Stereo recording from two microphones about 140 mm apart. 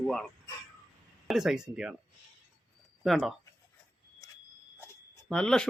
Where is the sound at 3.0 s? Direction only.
Centre (ahead or behind).